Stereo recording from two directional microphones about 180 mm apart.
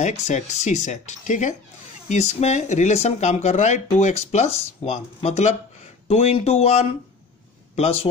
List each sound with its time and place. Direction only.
0.0 s a man's voice: 40° left (ahead or behind)